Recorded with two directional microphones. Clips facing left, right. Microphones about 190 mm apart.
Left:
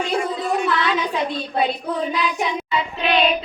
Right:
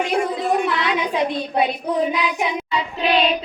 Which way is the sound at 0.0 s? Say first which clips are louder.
Right 2 dB; 20° right (ahead or behind).